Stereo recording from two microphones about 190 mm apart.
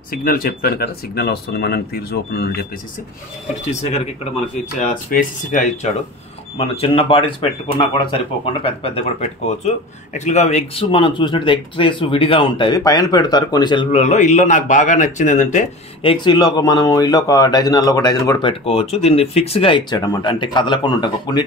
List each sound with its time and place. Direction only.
0.1 s speech: 50° left (ahead or behind)
3.8 s speech: 35° left (ahead or behind)
4.7 s speech: 45° left (ahead or behind)
6.6 s a man's voice: 30° left (ahead or behind)
13.9 s a man's voice: 40° left (ahead or behind); by 18.5 s 20° left (ahead or behind)
18.5 s a man's voice: 30° left (ahead or behind)